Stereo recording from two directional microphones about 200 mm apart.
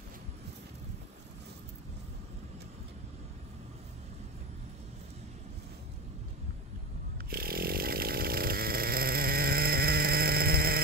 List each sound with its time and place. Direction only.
7.2 s chainsaw: 50° right (ahead or behind)